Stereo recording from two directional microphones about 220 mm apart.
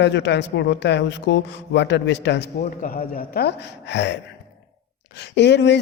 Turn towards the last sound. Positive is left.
turn(degrees=50)  # may be behind; listen again after turning